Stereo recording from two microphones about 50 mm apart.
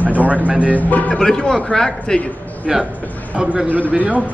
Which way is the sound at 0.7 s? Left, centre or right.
Left.